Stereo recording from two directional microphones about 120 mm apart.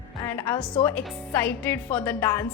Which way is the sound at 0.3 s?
15° left (ahead or behind).